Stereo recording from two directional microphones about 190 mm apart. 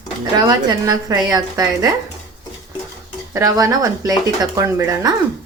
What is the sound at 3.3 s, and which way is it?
Speech, 15° right (ahead or behind).